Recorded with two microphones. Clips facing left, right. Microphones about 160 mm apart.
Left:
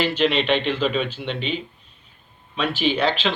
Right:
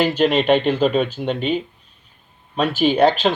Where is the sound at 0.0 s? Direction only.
45° right (ahead or behind).